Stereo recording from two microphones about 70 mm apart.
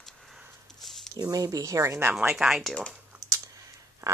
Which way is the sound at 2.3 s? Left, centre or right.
Centre.